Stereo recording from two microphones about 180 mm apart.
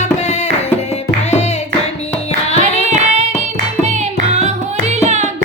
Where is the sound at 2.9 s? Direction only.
40° right (ahead or behind).